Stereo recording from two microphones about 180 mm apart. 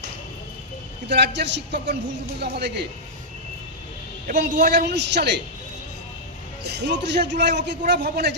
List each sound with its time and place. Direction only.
1.0 s a man's voice: 75° right (ahead or behind)
4.4 s a man's voice: 70° right (ahead or behind)
6.6 s a man's voice: 70° right (ahead or behind)